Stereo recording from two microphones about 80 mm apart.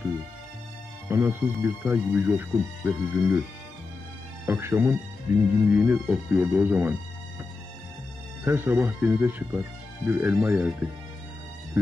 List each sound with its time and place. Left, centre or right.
1.0 s speech: right
4.5 s speech: right
5.7 s speech: centre
8.5 s speech: right